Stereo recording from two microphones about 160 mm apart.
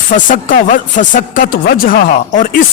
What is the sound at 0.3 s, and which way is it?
Speech, 55° left (ahead or behind).